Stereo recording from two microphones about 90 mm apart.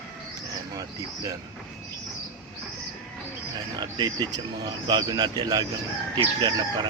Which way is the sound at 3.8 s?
55° right (ahead or behind).